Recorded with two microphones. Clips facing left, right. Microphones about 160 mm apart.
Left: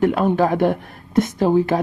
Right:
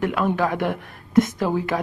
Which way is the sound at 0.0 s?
35° left (ahead or behind).